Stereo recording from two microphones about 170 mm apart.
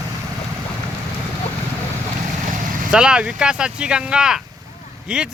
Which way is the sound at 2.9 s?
5° right (ahead or behind).